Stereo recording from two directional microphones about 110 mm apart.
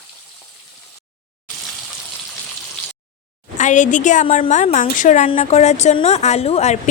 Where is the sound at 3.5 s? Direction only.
90° left.